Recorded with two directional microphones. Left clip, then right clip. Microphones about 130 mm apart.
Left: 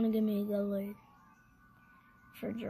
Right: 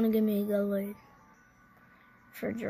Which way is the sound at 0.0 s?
55° right (ahead or behind).